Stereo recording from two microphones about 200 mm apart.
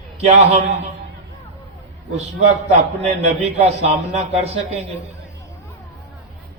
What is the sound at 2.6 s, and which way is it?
A man's voice, 35° right (ahead or behind).